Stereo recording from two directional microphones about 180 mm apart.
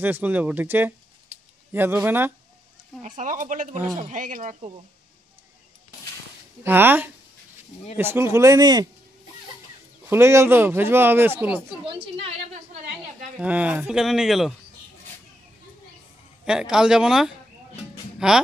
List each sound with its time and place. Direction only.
0.0 s speech: 10° right (ahead or behind)
3.0 s speech: 45° right (ahead or behind)
6.6 s speech: 10° right (ahead or behind)
10.0 s speech: 15° right (ahead or behind)
11.8 s a woman's voice: 30° right (ahead or behind)
13.4 s speech: 5° right (ahead or behind)
16.4 s speech: 5° right (ahead or behind)